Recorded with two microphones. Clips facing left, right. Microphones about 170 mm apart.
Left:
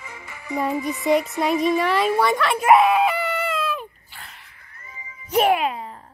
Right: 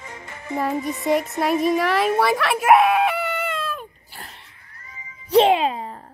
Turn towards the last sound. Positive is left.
turn(degrees=-25)  # may be behind; listen again after turning